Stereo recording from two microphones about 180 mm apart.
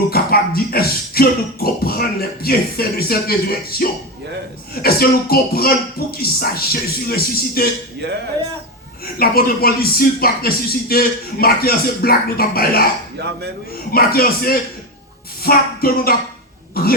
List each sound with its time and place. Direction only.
0.1 s speech: 60° left (ahead or behind)
9.1 s speech: 55° left (ahead or behind)
13.2 s speech: 65° right (ahead or behind)
13.9 s speech: 55° left (ahead or behind)